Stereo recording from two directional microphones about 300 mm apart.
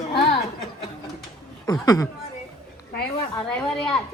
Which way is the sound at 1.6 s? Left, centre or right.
Centre.